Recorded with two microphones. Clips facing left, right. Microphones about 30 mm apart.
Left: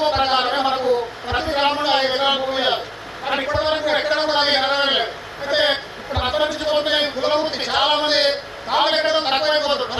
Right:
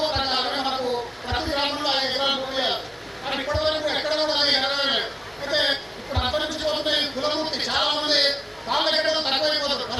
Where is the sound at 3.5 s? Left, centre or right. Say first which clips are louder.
Left 3 dB; centre.